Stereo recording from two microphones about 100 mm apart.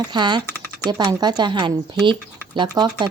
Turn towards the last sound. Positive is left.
turn(degrees=-45)  # may be behind; listen again after turning